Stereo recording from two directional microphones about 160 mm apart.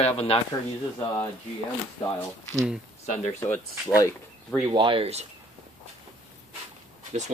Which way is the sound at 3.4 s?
15° left (ahead or behind).